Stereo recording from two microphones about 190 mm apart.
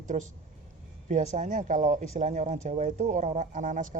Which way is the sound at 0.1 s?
40° right (ahead or behind).